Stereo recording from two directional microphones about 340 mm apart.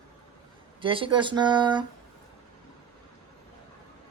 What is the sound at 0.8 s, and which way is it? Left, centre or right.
Speech, centre.